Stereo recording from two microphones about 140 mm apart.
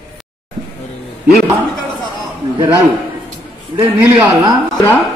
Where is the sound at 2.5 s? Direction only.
35° right (ahead or behind).